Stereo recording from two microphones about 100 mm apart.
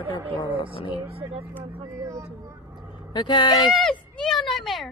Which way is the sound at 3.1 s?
50° left (ahead or behind).